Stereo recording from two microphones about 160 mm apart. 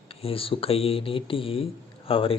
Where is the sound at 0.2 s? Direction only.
35° left (ahead or behind).